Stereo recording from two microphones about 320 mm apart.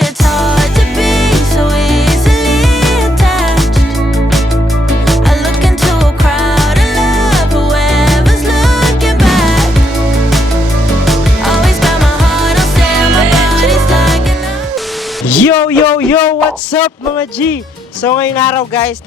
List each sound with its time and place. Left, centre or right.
0.0 s music: centre
6.4 s music: centre
11.0 s music: centre
15.3 s a sound: centre
16.7 s music: centre
18.0 s speech: centre